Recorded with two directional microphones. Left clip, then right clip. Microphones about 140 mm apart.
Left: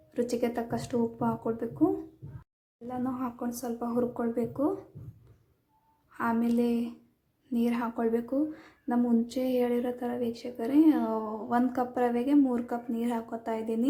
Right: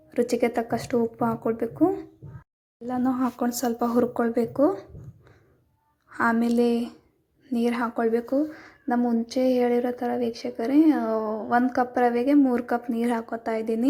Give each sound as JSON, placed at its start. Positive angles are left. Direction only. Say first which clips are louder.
{"t": 0.1, "sound": "speech", "louder": "right 6 dB", "side_deg": -10}
{"t": 2.8, "sound": "speech", "louder": "right 8 dB", "side_deg": -30}
{"t": 6.1, "sound": "speech", "louder": "right 6 dB", "side_deg": -20}